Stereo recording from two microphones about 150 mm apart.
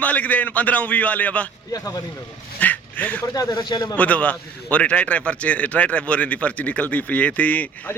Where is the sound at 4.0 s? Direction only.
10° left (ahead or behind).